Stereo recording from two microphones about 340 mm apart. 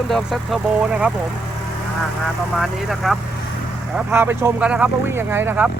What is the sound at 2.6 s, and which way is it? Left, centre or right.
Speech, centre.